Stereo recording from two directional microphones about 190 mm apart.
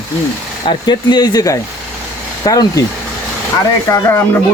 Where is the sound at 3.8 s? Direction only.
15° left (ahead or behind).